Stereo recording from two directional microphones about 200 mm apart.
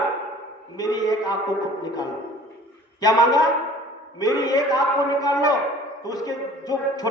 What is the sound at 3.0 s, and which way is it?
A woman's voice, 20° left (ahead or behind).